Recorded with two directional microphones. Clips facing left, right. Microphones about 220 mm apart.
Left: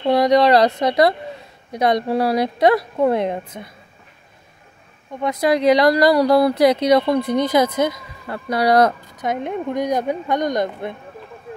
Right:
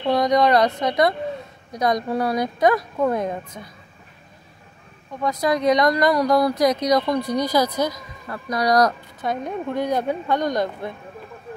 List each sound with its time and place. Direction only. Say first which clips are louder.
0.0 s speech: left 3 dB; 30° left (ahead or behind)
5.2 s speech: left 3 dB; 30° left (ahead or behind)